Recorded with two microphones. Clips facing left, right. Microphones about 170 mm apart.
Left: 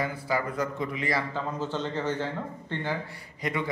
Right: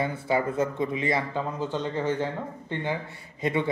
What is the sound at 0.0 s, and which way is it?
A man's voice, 25° right (ahead or behind).